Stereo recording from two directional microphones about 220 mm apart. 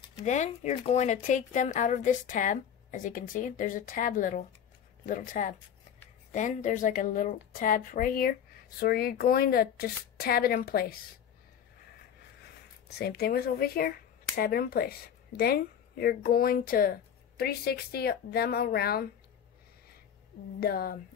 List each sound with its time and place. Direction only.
0.2 s a woman's voice: 30° left (ahead or behind)
12.9 s speech: 45° left (ahead or behind)
20.6 s speech: 45° left (ahead or behind)